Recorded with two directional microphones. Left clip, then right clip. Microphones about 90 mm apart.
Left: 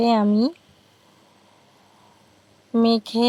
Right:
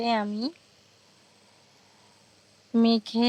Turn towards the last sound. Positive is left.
turn(degrees=30)  # may be behind; listen again after turning